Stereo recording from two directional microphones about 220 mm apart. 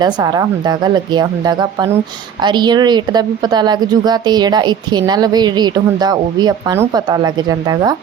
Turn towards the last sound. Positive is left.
turn(degrees=-20)  # may be behind; listen again after turning